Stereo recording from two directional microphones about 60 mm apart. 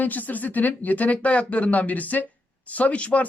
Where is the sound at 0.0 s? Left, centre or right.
Left.